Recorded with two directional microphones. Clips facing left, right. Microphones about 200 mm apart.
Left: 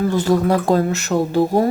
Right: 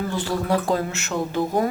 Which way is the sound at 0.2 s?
40° left (ahead or behind).